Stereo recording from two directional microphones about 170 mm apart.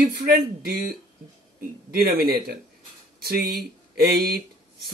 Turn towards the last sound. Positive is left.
turn(degrees=-65)  # may be behind; listen again after turning